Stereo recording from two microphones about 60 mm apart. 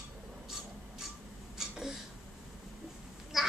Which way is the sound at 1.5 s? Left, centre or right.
Centre.